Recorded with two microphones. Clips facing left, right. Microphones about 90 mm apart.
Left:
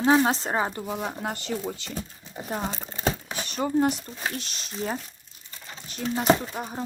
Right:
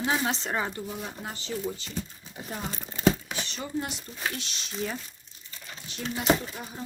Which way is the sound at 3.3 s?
45° left (ahead or behind).